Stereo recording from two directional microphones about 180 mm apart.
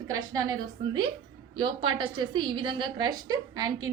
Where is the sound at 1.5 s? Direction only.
25° right (ahead or behind).